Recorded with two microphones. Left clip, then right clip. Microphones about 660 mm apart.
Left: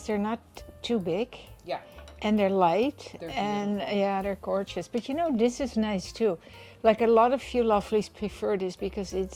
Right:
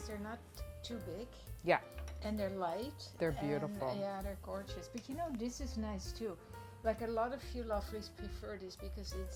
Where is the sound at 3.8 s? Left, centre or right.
Left.